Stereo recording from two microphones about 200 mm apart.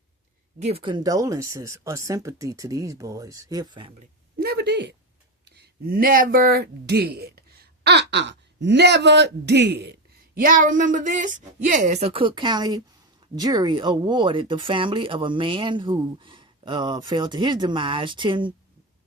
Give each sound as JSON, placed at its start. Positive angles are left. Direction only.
{"t": 0.6, "sound": "speech", "side_deg": -30}
{"t": 4.4, "sound": "a sound", "side_deg": -55}
{"t": 5.5, "sound": "speech", "side_deg": -50}
{"t": 10.3, "sound": "a woman's voice", "side_deg": -45}